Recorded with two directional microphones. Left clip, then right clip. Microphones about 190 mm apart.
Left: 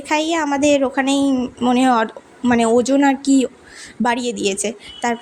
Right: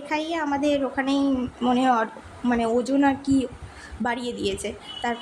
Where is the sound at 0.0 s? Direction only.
40° left (ahead or behind).